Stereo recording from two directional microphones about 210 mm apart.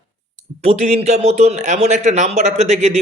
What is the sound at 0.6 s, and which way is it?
Speech, 30° right (ahead or behind).